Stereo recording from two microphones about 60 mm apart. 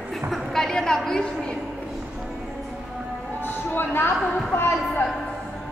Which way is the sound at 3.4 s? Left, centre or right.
Left.